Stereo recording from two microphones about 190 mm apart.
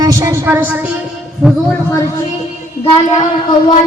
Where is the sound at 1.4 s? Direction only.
Centre (ahead or behind).